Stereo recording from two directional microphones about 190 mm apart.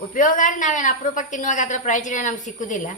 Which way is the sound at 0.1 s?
45° left (ahead or behind).